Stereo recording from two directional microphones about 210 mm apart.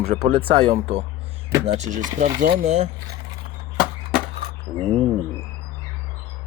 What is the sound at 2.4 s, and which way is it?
Speech, 45° right (ahead or behind).